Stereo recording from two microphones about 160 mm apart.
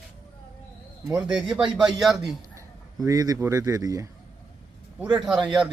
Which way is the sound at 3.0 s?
25° right (ahead or behind).